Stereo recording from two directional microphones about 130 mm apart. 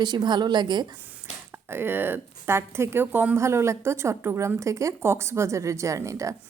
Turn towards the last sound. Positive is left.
turn(degrees=-25)  # may be behind; listen again after turning